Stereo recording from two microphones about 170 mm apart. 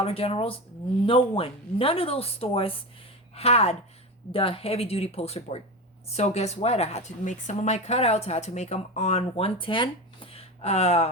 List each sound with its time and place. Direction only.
0.0 s speech: 35° left (ahead or behind)